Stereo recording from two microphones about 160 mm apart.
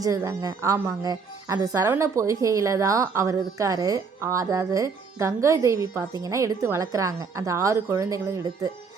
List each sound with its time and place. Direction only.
0.0 s speech: 20° right (ahead or behind)